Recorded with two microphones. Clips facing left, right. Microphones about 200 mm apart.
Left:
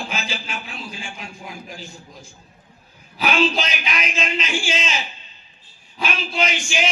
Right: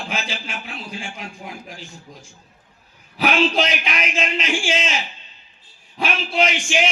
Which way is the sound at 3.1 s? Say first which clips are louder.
Right 1 dB; 70° right (ahead or behind).